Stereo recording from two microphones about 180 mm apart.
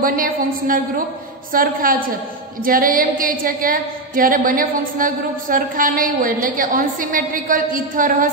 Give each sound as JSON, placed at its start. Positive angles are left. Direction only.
{"t": 0.0, "sound": "a woman's voice", "side_deg": -50}